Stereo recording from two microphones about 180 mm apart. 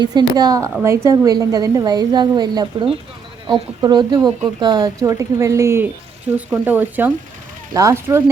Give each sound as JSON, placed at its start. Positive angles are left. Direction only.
{"t": 0.0, "sound": "speech", "side_deg": -25}